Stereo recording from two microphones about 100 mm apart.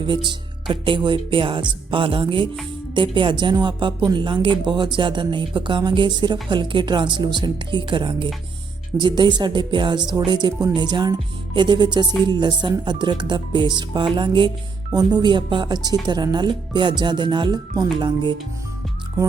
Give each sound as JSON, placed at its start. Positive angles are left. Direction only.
{"t": 0.0, "sound": "speech", "side_deg": -50}